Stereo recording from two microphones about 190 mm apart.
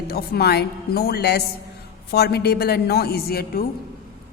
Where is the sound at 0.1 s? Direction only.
55° left (ahead or behind).